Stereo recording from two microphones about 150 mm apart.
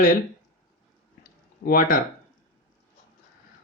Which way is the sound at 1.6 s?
70° left (ahead or behind).